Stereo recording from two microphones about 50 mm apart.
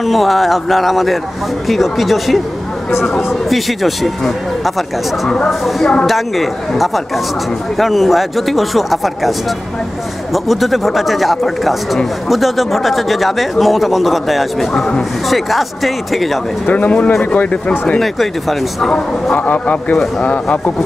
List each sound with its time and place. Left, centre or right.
0.0 s speech: centre
7.7 s speech: centre
10.3 s speech: centre
16.6 s speech: left
17.9 s speech: centre
19.3 s speech: left